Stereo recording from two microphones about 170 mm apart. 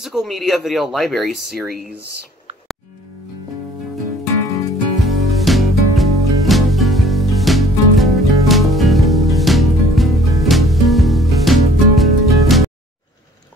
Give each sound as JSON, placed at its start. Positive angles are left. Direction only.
{"t": 0.0, "sound": "speech", "side_deg": 0}
{"t": 5.0, "sound": "music", "side_deg": 0}